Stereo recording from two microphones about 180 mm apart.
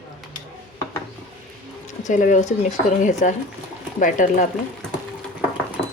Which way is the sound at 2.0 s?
45° left (ahead or behind).